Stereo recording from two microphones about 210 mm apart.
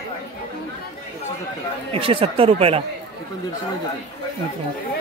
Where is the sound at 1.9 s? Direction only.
25° right (ahead or behind).